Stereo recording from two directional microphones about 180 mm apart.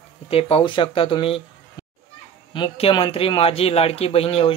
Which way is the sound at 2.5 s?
25° left (ahead or behind).